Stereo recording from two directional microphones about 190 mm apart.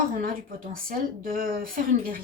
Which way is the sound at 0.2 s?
50° right (ahead or behind).